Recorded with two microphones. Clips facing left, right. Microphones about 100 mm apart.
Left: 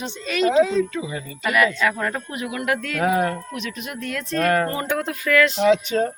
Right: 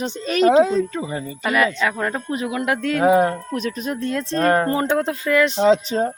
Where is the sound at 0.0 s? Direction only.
40° right (ahead or behind); by 3.3 s 25° right (ahead or behind).